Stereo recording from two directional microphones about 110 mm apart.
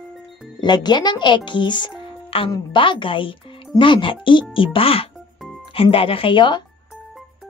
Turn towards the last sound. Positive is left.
turn(degrees=45)  # may be behind; listen again after turning